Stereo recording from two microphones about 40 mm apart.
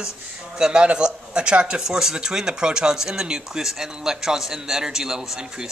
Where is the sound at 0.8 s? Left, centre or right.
Right.